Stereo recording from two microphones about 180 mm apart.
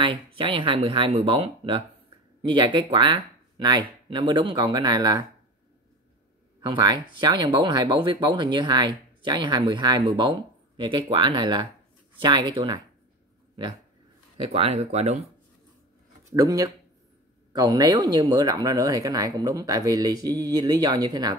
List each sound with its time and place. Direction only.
0.0 s speech: 30° right (ahead or behind)
6.6 s speech: 25° right (ahead or behind)
14.4 s speech: 30° right (ahead or behind)
16.3 s speech: 20° right (ahead or behind)